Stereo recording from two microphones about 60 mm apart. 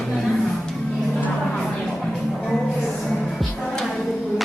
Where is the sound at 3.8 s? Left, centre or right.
Centre.